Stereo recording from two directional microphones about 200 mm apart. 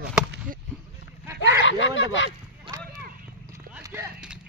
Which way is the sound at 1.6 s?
65° left (ahead or behind).